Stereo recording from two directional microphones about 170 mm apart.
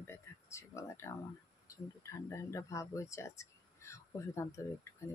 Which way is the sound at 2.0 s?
15° left (ahead or behind).